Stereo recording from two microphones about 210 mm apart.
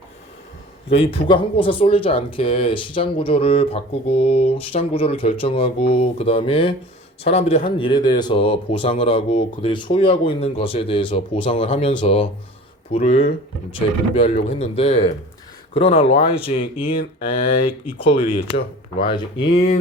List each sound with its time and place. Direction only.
0.9 s speech: 25° left (ahead or behind)
14.5 s speech: 30° left (ahead or behind)